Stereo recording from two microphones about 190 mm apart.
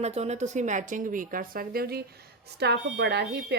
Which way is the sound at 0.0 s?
35° right (ahead or behind).